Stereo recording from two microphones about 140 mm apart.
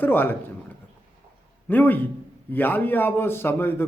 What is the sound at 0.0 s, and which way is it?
Speech, 15° left (ahead or behind).